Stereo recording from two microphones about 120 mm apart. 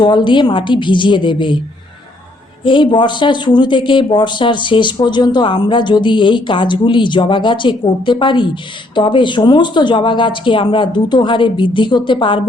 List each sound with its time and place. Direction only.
0.0 s speech: 40° left (ahead or behind)
2.6 s speech: 40° left (ahead or behind)